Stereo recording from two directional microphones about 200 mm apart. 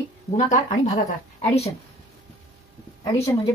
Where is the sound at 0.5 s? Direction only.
35° left (ahead or behind).